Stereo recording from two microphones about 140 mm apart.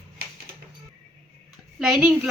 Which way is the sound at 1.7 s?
5° right (ahead or behind).